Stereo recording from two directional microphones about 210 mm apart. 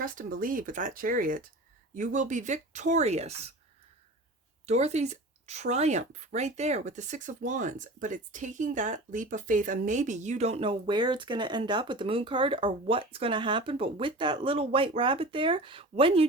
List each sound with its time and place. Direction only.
0.0 s speech: 40° right (ahead or behind)
4.6 s speech: 30° right (ahead or behind)